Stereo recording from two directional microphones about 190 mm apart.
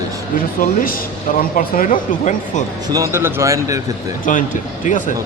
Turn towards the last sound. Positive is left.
turn(degrees=45)  # may be behind; listen again after turning